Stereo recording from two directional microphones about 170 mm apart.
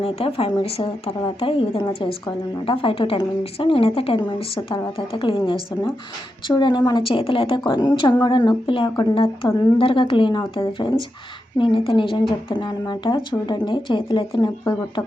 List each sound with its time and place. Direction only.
0.0 s a woman's voice: 35° left (ahead or behind)